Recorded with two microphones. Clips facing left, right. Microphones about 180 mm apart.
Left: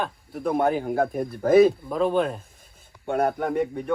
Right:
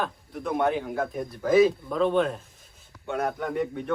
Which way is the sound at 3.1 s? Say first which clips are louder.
Left 5 dB; 55° left (ahead or behind).